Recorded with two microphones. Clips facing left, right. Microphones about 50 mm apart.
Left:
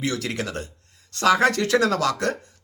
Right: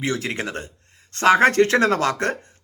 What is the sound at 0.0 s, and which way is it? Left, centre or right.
Speech, right.